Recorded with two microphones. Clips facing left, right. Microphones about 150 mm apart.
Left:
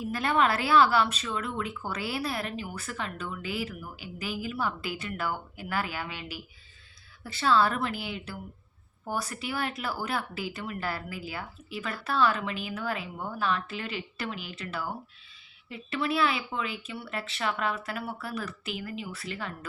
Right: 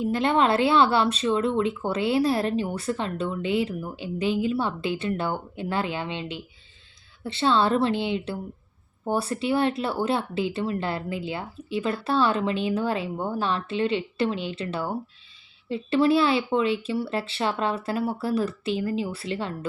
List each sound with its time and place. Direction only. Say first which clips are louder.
0.0 s speech: right 5 dB; 25° right (ahead or behind)